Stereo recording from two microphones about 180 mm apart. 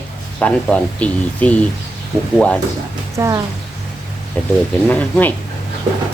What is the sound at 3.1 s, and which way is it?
Speech, 15° right (ahead or behind).